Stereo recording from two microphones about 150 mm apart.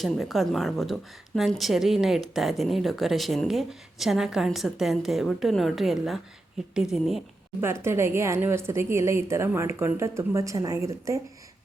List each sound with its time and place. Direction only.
0.0 s speech: centre (ahead or behind)
7.6 s speech: 15° right (ahead or behind)